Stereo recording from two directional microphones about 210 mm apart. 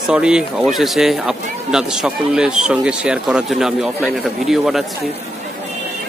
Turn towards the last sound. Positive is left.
turn(degrees=0)  # may be behind; listen again after turning